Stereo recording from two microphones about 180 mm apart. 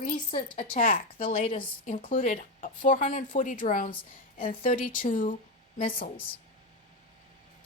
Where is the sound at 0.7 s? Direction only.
50° left (ahead or behind).